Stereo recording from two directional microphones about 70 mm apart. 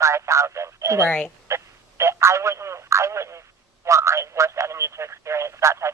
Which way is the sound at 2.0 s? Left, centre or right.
Right.